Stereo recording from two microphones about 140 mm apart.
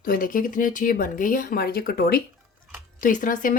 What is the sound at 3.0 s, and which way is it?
Speech, 70° left (ahead or behind).